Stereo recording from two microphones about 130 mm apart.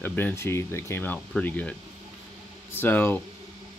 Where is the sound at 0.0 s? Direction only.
15° left (ahead or behind).